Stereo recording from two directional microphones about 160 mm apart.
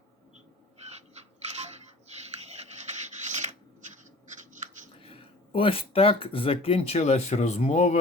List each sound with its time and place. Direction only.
2.5 s rub: 45° right (ahead or behind)
4.9 s speech: 35° left (ahead or behind)